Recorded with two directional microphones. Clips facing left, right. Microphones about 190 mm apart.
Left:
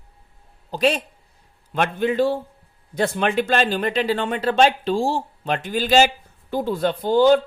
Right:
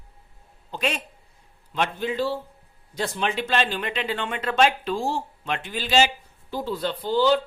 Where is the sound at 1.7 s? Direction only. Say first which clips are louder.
Left 6 dB; 55° left (ahead or behind).